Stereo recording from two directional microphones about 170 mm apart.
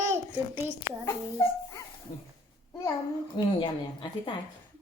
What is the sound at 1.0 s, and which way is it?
Speech, 20° left (ahead or behind).